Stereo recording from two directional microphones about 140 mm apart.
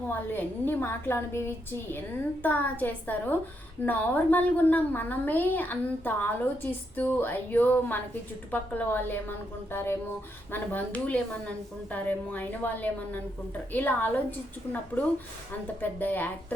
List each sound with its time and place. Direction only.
0.3 s a woman's voice: 15° left (ahead or behind)
2.4 s a woman's voice: 15° left (ahead or behind)